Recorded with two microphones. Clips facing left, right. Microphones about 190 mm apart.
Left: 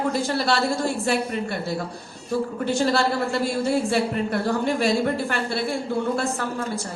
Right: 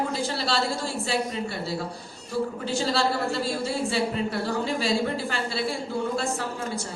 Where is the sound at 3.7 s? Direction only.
55° left (ahead or behind).